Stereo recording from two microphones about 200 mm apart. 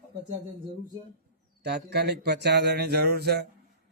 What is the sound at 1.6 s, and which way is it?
A man's voice, 55° right (ahead or behind).